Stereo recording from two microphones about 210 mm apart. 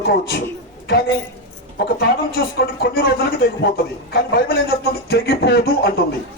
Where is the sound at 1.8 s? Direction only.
45° left (ahead or behind).